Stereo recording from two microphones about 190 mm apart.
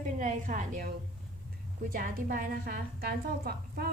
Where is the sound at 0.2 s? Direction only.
45° right (ahead or behind).